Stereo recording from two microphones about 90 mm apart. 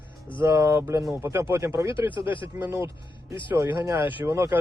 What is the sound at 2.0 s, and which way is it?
Speech, 65° left (ahead or behind).